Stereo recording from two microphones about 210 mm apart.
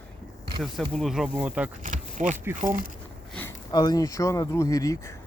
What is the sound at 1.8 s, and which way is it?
Speech, 35° right (ahead or behind).